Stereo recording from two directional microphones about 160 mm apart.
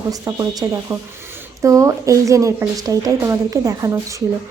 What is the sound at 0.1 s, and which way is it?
A woman's voice, 25° right (ahead or behind).